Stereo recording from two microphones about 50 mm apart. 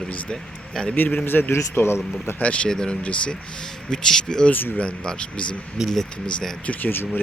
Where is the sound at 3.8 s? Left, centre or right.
Centre.